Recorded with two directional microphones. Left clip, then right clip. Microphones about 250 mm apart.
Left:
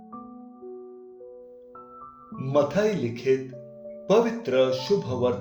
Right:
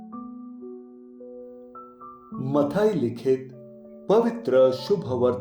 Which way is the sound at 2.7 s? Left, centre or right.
Right.